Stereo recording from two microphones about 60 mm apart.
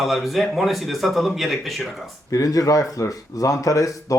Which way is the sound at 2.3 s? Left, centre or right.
Left.